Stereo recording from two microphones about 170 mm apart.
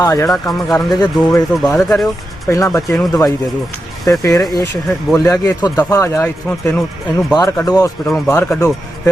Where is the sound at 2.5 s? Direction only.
20° left (ahead or behind).